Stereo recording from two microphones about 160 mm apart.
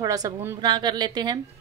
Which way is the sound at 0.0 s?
20° right (ahead or behind).